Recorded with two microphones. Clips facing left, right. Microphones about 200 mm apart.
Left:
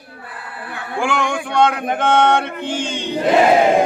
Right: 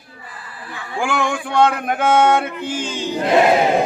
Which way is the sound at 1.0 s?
5° right (ahead or behind).